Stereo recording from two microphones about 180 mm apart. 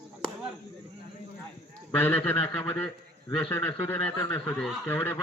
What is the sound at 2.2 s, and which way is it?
Speech, 10° left (ahead or behind).